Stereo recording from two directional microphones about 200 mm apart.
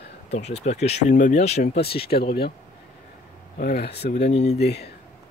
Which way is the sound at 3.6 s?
45° left (ahead or behind).